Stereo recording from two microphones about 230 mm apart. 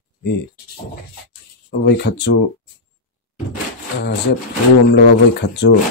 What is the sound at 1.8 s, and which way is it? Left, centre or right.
Speech, left.